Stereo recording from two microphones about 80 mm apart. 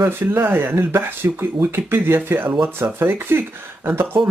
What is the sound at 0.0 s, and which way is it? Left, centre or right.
Speech, right.